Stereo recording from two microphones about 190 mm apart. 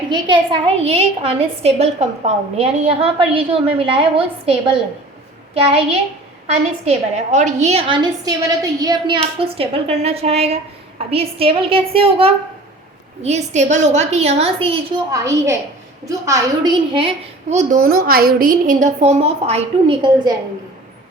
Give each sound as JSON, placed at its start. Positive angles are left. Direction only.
{"t": 0.1, "sound": "a woman's voice", "side_deg": -25}
{"t": 6.8, "sound": "a woman's voice", "side_deg": -35}
{"t": 15.1, "sound": "a woman's voice", "side_deg": -15}
{"t": 18.9, "sound": "a woman's voice", "side_deg": -35}